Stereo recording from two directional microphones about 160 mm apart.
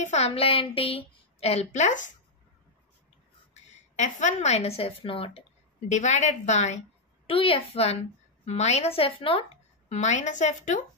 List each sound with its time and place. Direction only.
0.0 s a woman's voice: 45° left (ahead or behind)
3.7 s a woman's voice: 50° left (ahead or behind)
5.8 s a woman's voice: 45° left (ahead or behind)
7.2 s a woman's voice: 35° left (ahead or behind)
9.8 s a woman's voice: 50° left (ahead or behind)